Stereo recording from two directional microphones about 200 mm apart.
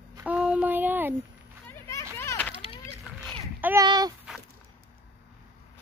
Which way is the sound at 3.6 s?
15° right (ahead or behind).